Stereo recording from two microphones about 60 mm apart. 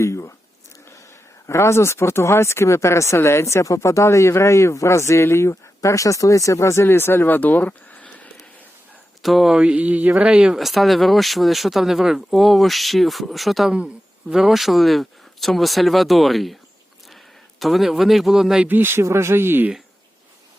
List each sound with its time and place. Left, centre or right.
0.0 s squish: left
0.9 s speech: left
6.8 s speech: left
9.2 s speech: centre
9.6 s speech: right
10.6 s speech: centre
13.7 s speech: centre
18.7 s speech: right
19.0 s speech: right